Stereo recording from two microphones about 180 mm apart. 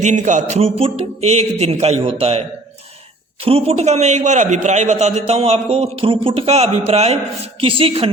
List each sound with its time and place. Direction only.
0.0 s a man's voice: 40° right (ahead or behind)
3.4 s a man's voice: 30° right (ahead or behind)